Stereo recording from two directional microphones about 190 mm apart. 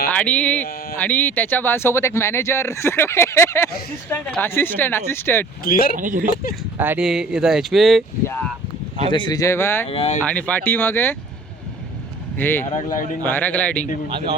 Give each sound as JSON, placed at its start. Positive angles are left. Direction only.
{"t": 0.1, "sound": "speech", "side_deg": 5}
{"t": 5.6, "sound": "speech", "side_deg": 50}
{"t": 6.0, "sound": "speech", "side_deg": -45}
{"t": 6.7, "sound": "speech", "side_deg": -10}
{"t": 9.1, "sound": "speech", "side_deg": 20}
{"t": 9.8, "sound": "speech", "side_deg": 30}
{"t": 10.2, "sound": "speech", "side_deg": 10}
{"t": 12.4, "sound": "speech", "side_deg": 10}
{"t": 12.7, "sound": "speech", "side_deg": 40}
{"t": 13.2, "sound": "speech", "side_deg": 10}